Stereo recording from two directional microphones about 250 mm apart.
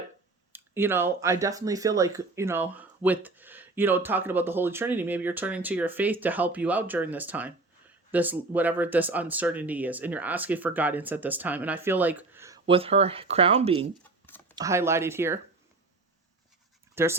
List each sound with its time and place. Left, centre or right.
0.5 s speech: centre
12.6 s speech: right
14.5 s speech: centre
16.9 s speech: centre